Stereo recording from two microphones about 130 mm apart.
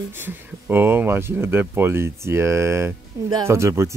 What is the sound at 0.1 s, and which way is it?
Speech, 15° right (ahead or behind).